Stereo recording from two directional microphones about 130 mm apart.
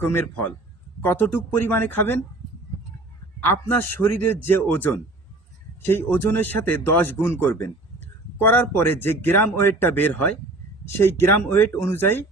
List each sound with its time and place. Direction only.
0.0 s speech: 15° left (ahead or behind)
3.5 s speech: 20° left (ahead or behind)